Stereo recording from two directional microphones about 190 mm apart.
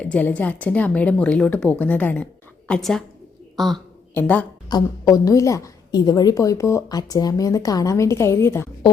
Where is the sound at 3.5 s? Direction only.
Centre (ahead or behind).